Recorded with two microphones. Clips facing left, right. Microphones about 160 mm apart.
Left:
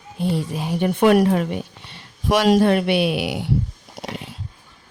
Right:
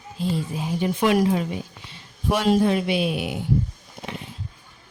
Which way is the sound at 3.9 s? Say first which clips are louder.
Left 4 dB; 80° left.